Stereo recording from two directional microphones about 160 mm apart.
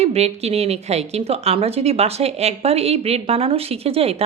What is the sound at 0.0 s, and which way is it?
A woman's voice, 40° right (ahead or behind).